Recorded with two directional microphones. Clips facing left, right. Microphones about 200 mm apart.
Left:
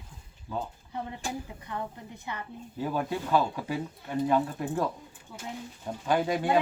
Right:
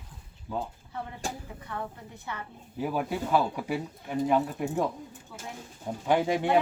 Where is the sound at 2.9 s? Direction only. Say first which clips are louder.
Even; 10° right (ahead or behind).